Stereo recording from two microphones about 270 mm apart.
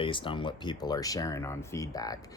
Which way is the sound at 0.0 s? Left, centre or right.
Centre.